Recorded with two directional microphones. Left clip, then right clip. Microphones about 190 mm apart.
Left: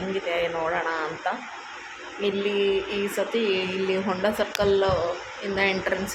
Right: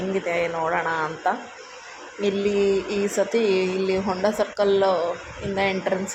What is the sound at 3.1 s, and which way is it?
A woman's voice, 15° right (ahead or behind).